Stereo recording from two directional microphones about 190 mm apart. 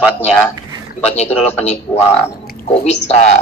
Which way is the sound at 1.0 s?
35° left (ahead or behind).